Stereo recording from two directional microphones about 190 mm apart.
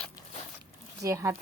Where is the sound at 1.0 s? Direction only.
15° right (ahead or behind).